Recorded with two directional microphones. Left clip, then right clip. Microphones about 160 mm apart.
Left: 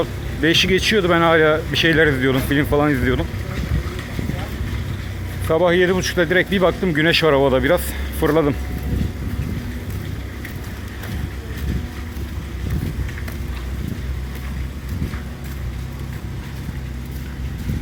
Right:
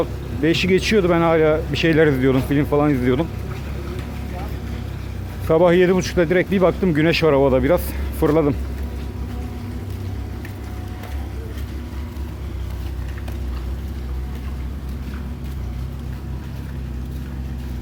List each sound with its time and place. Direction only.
0.0 s speech: 15° right (ahead or behind)
5.5 s speech: 25° right (ahead or behind)